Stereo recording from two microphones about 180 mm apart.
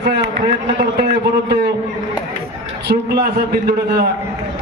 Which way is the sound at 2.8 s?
65° right (ahead or behind).